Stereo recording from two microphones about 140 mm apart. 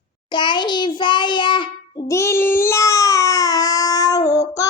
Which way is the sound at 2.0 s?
20° left (ahead or behind).